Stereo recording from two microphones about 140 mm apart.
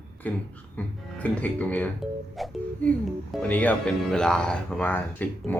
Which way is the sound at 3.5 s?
10° left (ahead or behind).